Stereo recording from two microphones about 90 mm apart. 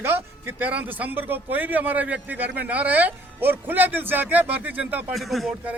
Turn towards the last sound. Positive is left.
turn(degrees=0)  # may be behind; listen again after turning